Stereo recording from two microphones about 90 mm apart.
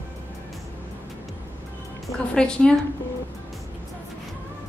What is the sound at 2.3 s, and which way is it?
Speech, 10° left (ahead or behind).